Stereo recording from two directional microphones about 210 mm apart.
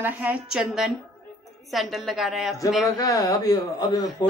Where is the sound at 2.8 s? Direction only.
15° left (ahead or behind).